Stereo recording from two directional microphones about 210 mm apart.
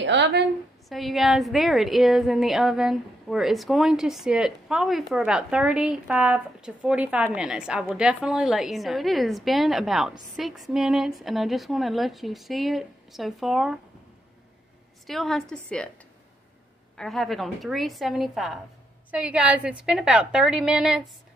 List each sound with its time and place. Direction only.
0.0 s a woman's voice: 55° right (ahead or behind)
0.8 s a woman's voice: centre (ahead or behind)
15.0 s a woman's voice: centre (ahead or behind)
16.9 s a woman's voice: centre (ahead or behind)